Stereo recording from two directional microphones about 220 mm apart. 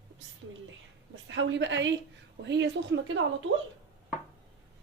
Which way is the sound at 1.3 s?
55° right (ahead or behind).